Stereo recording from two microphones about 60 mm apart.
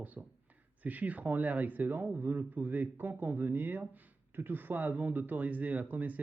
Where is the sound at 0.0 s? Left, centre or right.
Right.